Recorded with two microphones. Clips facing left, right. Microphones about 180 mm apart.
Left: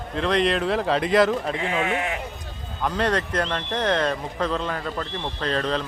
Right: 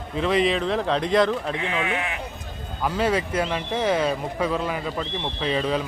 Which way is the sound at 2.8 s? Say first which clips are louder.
Right 1 dB; 5° right (ahead or behind).